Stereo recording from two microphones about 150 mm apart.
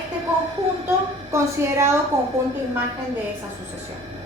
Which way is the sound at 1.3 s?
20° right (ahead or behind).